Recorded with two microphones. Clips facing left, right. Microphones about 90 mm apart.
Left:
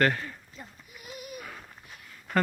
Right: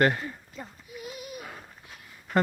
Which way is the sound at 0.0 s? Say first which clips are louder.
Right 2 dB; 20° right (ahead or behind).